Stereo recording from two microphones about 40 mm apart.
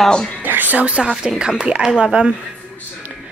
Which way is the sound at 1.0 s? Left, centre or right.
Right.